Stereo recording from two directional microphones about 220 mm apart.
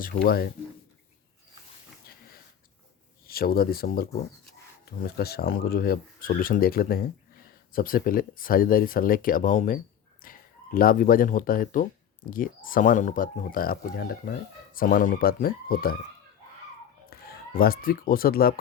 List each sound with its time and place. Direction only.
0.0 s speech: 45° left (ahead or behind)
3.2 s speech: 45° left (ahead or behind)
17.1 s speech: 45° left (ahead or behind)